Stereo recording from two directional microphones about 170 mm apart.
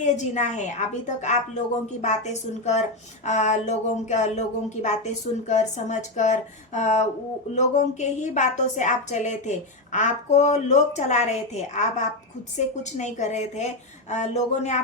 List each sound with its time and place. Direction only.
0.0 s a woman's voice: 45° left (ahead or behind)